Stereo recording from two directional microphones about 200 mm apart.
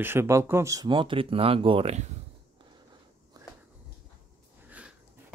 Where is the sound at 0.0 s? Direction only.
10° right (ahead or behind); by 2.0 s 30° right (ahead or behind).